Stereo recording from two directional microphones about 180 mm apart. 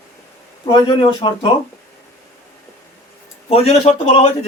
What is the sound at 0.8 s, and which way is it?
Speech, 30° left (ahead or behind).